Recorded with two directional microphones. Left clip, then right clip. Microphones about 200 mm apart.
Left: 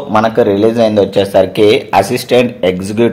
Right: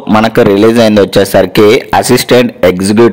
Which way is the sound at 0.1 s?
35° right (ahead or behind).